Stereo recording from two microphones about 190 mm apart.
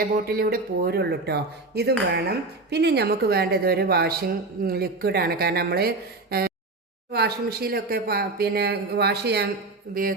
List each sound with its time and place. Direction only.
0.0 s speech: 50° right (ahead or behind)
7.1 s speech: 55° right (ahead or behind)
9.9 s speech: 50° right (ahead or behind)